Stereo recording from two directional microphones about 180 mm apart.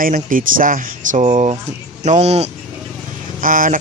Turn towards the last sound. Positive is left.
turn(degrees=-50)  # may be behind; listen again after turning